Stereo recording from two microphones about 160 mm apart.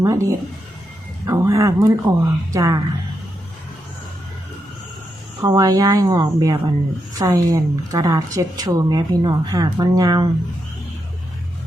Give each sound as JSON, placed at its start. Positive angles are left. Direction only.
{"t": 0.0, "sound": "speech", "side_deg": -20}
{"t": 5.4, "sound": "speech", "side_deg": -25}